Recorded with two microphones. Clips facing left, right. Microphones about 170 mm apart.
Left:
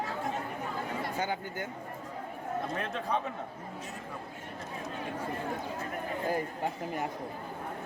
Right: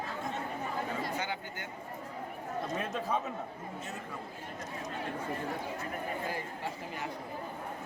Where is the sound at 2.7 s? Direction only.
5° right (ahead or behind).